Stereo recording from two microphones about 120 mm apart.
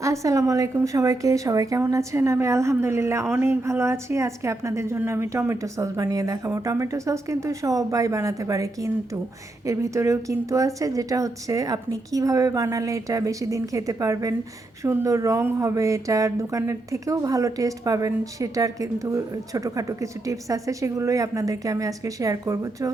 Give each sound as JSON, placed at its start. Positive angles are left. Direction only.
{"t": 0.0, "sound": "speech", "side_deg": -25}